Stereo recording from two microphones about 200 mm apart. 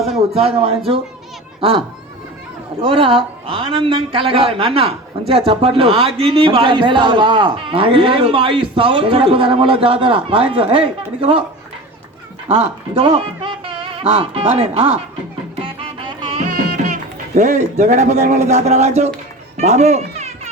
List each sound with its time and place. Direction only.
0.1 s speech: 30° right (ahead or behind)
2.8 s speech: 25° right (ahead or behind)
12.5 s speech: 30° right (ahead or behind)
15.5 s music: 25° right (ahead or behind)
16.4 s speech: 45° right (ahead or behind)
19.5 s cat: 35° right (ahead or behind)